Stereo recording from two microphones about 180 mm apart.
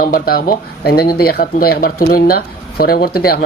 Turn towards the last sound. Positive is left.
turn(degrees=55)  # may be behind; listen again after turning